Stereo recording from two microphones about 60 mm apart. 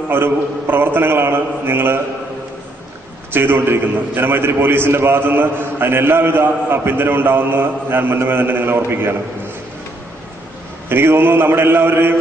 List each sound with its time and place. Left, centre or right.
0.1 s a man's voice: right
3.3 s a man's voice: right
10.9 s a man's voice: right